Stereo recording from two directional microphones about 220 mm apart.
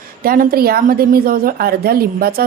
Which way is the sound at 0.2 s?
40° right (ahead or behind).